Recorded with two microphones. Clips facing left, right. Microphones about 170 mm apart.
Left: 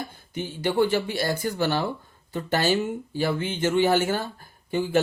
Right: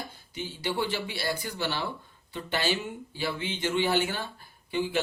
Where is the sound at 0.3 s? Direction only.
50° left (ahead or behind).